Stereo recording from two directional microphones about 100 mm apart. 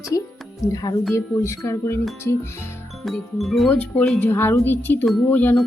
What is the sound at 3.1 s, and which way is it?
Music, centre (ahead or behind).